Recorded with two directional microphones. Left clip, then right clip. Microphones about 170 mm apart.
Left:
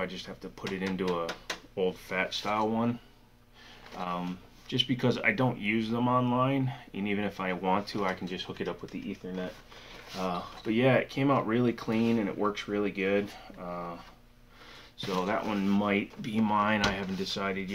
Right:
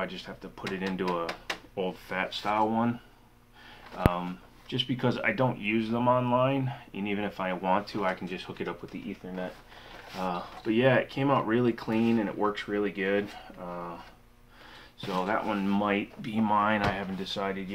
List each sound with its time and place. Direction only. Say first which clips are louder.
0.0 s speech: right 1 dB; 5° left (ahead or behind)
9.2 s speech: right 3 dB; 15° left (ahead or behind)
15.0 s speech: right 1 dB; 10° left (ahead or behind)